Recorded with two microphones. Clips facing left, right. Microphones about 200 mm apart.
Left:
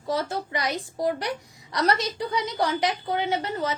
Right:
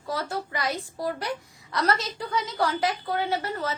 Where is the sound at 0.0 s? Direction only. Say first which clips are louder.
Left 3 dB; 20° left (ahead or behind).